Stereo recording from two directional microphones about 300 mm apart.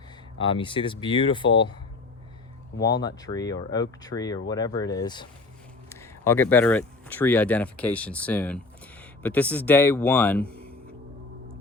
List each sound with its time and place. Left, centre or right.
0.3 s speech: centre
2.8 s speech: centre